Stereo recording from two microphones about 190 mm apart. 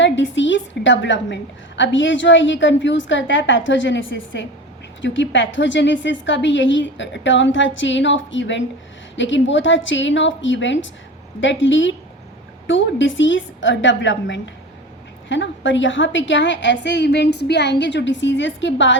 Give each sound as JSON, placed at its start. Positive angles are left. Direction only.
{"t": 0.0, "sound": "a woman's voice", "side_deg": 75}